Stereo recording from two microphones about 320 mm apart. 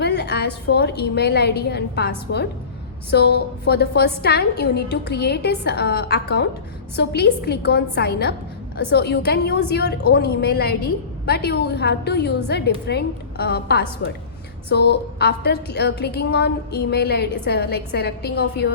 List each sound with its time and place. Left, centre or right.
0.0 s a woman's voice: left